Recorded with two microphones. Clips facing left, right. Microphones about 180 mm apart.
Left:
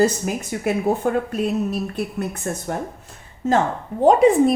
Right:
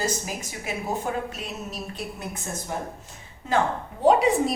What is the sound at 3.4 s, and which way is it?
A woman's voice, 45° left (ahead or behind).